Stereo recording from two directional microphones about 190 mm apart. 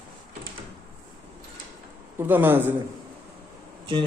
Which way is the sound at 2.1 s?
10° right (ahead or behind).